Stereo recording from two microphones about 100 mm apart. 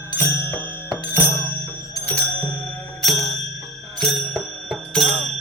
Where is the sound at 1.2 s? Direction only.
25° left (ahead or behind).